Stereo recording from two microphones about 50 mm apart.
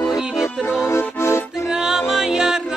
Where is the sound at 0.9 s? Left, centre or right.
Left.